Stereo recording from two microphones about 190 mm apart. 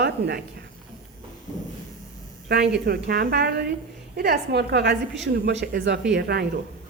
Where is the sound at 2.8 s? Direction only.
50° right (ahead or behind).